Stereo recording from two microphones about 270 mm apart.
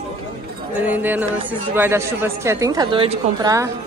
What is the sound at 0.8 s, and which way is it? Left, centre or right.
A woman's voice, centre.